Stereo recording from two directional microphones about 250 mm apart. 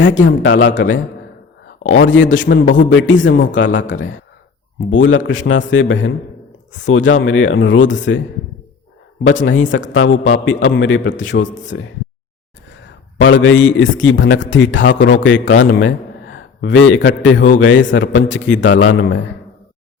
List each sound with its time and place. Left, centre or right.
0.4 s a man's voice: left
9.2 s a man's voice: left
13.1 s a man's voice: left